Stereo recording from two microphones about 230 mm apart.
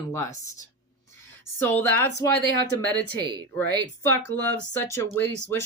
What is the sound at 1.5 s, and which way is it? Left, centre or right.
Speech, centre.